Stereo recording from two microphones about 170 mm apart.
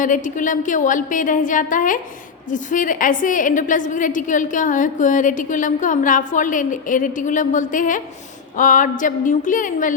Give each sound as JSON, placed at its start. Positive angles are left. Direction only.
{"t": 0.0, "sound": "a woman's voice", "side_deg": 50}